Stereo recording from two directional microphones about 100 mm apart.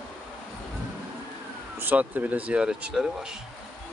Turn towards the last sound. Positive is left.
turn(degrees=-5)  # may be behind; listen again after turning